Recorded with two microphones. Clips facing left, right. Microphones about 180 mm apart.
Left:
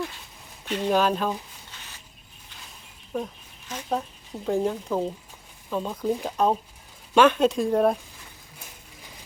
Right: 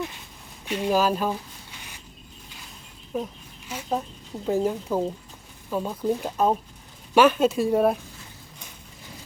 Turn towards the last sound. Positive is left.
turn(degrees=-5)  # may be behind; listen again after turning